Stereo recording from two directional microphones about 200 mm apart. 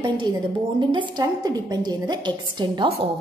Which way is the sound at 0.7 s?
25° right (ahead or behind).